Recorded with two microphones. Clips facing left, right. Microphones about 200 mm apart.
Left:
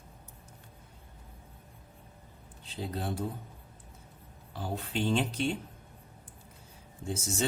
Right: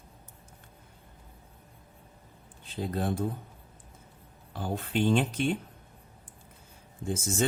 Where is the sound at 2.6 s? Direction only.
55° right (ahead or behind).